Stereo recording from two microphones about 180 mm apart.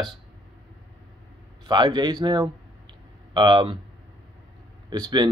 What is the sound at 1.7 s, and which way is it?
Speech, 25° right (ahead or behind).